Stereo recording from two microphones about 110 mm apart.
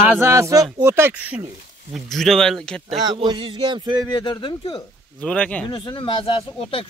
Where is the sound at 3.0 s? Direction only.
45° right (ahead or behind).